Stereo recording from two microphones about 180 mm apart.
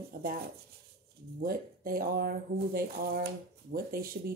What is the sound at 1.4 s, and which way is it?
Speech, 55° right (ahead or behind).